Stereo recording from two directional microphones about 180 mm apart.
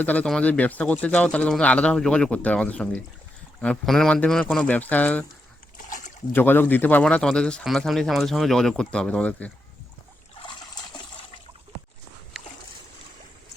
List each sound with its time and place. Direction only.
0.0 s speech: 10° left (ahead or behind)
5.7 s a sound: 45° left (ahead or behind)
6.3 s speech: 10° left (ahead or behind)
10.3 s trickle: 25° left (ahead or behind)